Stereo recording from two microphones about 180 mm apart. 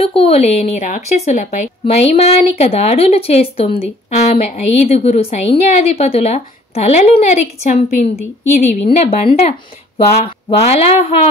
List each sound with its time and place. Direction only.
0.0 s a woman's voice: 30° left (ahead or behind)